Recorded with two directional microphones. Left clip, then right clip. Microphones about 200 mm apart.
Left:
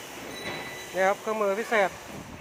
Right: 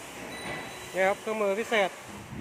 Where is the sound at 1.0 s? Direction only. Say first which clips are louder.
Left 2 dB; 5° right (ahead or behind).